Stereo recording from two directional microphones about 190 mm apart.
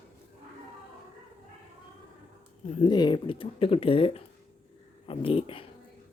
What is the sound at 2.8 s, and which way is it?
Speech, 25° left (ahead or behind).